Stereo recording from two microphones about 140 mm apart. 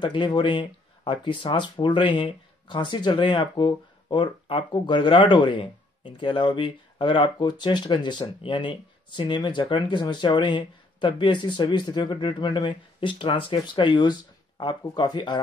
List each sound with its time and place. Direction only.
0.0 s speech: 35° left (ahead or behind)